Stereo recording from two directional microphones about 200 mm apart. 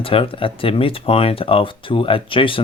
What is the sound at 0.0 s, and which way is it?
Speech, 25° left (ahead or behind).